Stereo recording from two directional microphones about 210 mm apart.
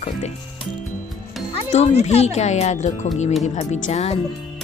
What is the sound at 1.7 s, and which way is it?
Speech, 30° left (ahead or behind).